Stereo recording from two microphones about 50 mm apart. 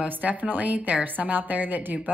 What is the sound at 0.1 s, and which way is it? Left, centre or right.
A woman's voice, right.